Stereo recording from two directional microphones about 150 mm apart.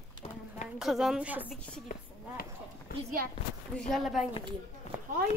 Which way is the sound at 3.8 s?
Centre (ahead or behind).